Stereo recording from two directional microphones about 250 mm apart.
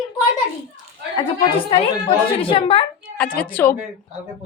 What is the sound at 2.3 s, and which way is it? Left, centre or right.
Speech, left.